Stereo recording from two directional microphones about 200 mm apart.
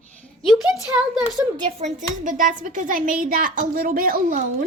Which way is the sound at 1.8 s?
40° right (ahead or behind).